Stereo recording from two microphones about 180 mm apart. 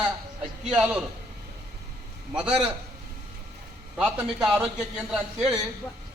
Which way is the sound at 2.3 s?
5° right (ahead or behind).